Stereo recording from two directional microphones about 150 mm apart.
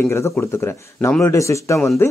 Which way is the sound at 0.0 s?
20° left (ahead or behind).